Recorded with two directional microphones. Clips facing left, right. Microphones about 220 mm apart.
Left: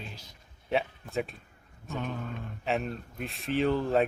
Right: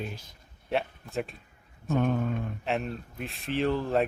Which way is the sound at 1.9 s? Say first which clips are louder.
Right 9 dB; 50° right (ahead or behind).